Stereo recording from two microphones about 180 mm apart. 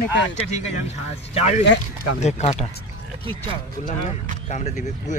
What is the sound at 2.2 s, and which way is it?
Speech, 40° left (ahead or behind).